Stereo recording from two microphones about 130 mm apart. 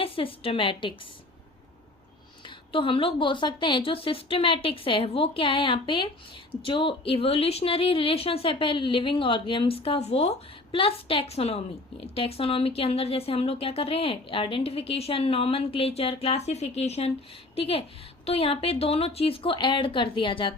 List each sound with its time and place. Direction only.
0.0 s a woman's voice: 45° left (ahead or behind)
2.4 s a woman's voice: 40° left (ahead or behind)